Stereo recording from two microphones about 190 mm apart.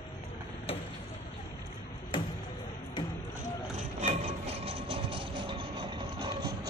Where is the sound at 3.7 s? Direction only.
35° right (ahead or behind); by 6.7 s 20° right (ahead or behind).